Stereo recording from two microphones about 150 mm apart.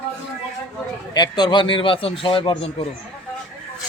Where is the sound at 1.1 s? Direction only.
30° left (ahead or behind).